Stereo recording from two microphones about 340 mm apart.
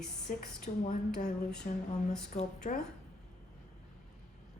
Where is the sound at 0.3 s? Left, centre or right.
Left.